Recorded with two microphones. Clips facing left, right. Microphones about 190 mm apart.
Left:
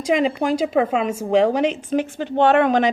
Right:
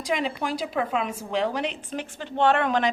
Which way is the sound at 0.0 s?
45° left (ahead or behind).